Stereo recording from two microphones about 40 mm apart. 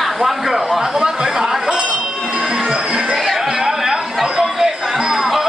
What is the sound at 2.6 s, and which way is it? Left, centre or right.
Music, right.